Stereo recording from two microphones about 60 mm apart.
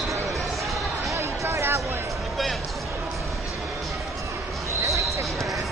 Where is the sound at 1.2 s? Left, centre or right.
Right.